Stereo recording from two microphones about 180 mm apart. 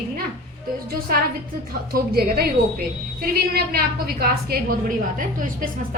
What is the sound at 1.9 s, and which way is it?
A woman's voice, 55° right (ahead or behind).